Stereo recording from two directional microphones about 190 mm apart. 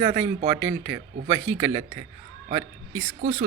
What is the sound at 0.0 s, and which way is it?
Speech, 25° right (ahead or behind).